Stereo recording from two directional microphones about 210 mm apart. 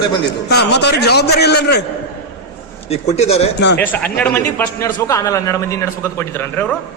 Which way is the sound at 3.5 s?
55° left (ahead or behind).